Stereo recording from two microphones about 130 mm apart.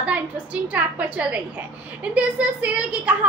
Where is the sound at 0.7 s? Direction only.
10° right (ahead or behind).